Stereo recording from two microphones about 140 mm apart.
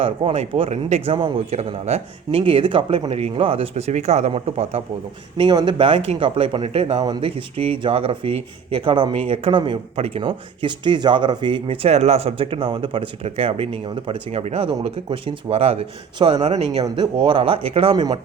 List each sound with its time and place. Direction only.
0.0 s speech: 40° right (ahead or behind)
5.4 s speech: 30° right (ahead or behind)
7.0 s speech: 30° right (ahead or behind)
7.3 s speech: 40° right (ahead or behind)
16.5 s speech: 45° right (ahead or behind)
16.8 s speech: 30° right (ahead or behind)